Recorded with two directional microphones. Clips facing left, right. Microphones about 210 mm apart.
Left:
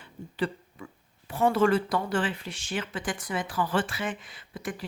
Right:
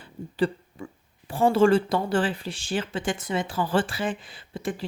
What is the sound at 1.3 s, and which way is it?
A woman's voice, 30° right (ahead or behind).